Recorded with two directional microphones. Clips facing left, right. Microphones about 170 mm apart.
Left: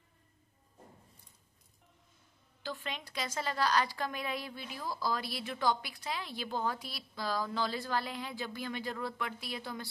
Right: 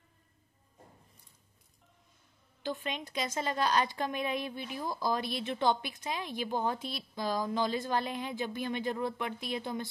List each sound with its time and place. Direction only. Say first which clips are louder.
2.6 s a woman's voice: right 5 dB; 20° right (ahead or behind)